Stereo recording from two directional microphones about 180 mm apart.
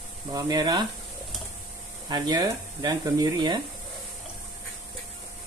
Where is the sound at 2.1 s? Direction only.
25° right (ahead or behind).